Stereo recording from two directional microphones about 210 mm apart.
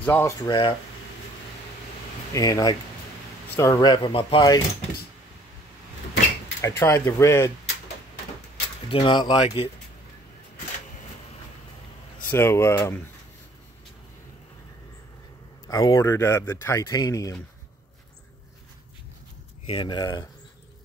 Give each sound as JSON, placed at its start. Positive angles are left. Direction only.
{"t": 0.0, "sound": "speech", "side_deg": 5}
{"t": 0.4, "sound": "speech", "side_deg": 20}
{"t": 2.3, "sound": "speech", "side_deg": 15}
{"t": 6.6, "sound": "speech", "side_deg": 15}
{"t": 8.8, "sound": "speech", "side_deg": 20}
{"t": 12.3, "sound": "speech", "side_deg": 10}
{"t": 15.7, "sound": "speech", "side_deg": 20}
{"t": 19.6, "sound": "speech", "side_deg": 25}